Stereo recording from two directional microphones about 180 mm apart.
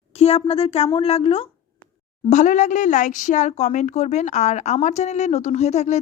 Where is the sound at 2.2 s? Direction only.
40° left (ahead or behind).